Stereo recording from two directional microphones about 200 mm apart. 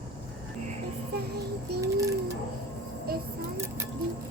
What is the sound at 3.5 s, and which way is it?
Music, 15° right (ahead or behind).